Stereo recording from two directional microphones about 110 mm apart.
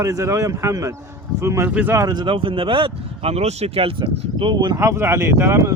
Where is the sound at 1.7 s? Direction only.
10° right (ahead or behind).